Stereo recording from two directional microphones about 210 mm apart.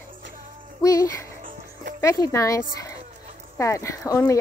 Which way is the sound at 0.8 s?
15° left (ahead or behind).